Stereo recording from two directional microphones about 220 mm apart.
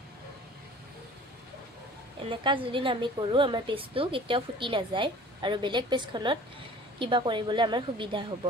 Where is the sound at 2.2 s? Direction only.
20° right (ahead or behind).